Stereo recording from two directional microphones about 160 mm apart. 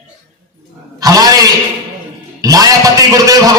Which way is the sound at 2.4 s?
20° right (ahead or behind).